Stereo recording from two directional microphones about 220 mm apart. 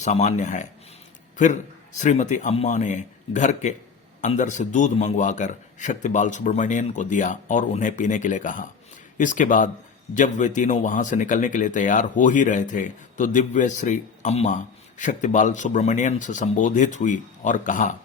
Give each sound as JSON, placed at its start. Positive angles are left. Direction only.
{"t": 0.0, "sound": "speech", "side_deg": 30}
{"t": 2.0, "sound": "speech", "side_deg": 35}